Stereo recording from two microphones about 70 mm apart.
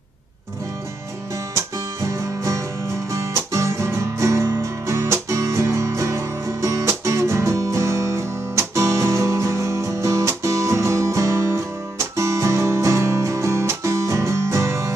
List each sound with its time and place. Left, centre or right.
1.5 s music: right